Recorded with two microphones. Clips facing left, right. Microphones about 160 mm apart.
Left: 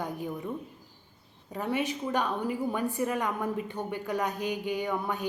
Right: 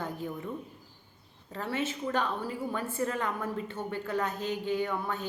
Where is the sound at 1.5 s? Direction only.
15° left (ahead or behind).